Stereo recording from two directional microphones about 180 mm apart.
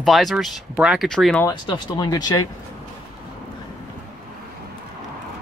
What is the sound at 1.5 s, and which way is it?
Speech, 25° left (ahead or behind).